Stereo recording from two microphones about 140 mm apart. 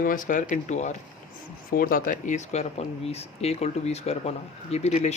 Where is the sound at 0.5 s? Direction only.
55° left (ahead or behind).